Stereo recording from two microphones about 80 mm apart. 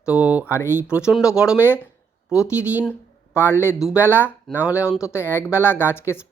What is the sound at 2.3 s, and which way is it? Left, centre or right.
Speech, centre.